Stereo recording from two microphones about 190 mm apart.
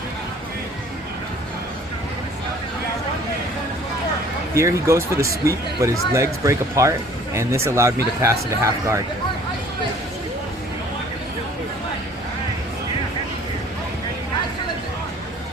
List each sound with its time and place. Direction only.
4.5 s speech: 15° right (ahead or behind)